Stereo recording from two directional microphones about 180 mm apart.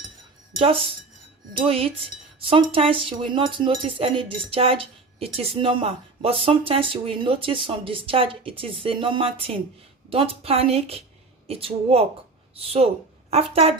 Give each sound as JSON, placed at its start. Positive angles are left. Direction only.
{"t": 1.6, "sound": "a woman's voice", "side_deg": -30}